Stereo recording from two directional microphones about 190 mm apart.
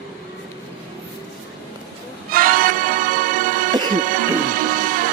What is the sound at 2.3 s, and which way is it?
Music, 50° right (ahead or behind).